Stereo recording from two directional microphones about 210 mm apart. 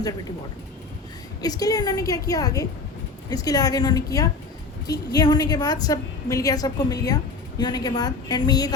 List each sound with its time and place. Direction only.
1.4 s a woman's voice: 20° left (ahead or behind)